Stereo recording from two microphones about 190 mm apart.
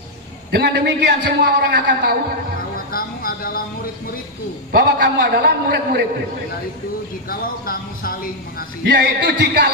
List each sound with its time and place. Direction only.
0.6 s a man's voice: 60° right (ahead or behind)
2.9 s speech: 50° left (ahead or behind)
4.7 s a man's voice: 60° right (ahead or behind)
7.2 s speech: 50° left (ahead or behind)
8.8 s a man's voice: 60° right (ahead or behind)